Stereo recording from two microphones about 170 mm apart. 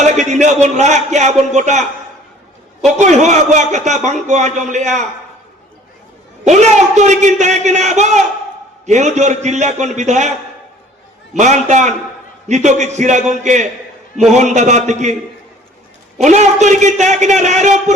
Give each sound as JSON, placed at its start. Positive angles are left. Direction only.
{"t": 0.0, "sound": "a man's voice", "side_deg": -45}
{"t": 3.0, "sound": "a man's voice", "side_deg": -45}
{"t": 6.4, "sound": "a man's voice", "side_deg": -45}
{"t": 11.3, "sound": "a man's voice", "side_deg": -45}
{"t": 16.2, "sound": "a man's voice", "side_deg": -45}